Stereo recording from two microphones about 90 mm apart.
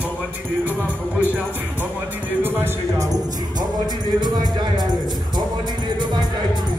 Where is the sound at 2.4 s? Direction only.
25° right (ahead or behind).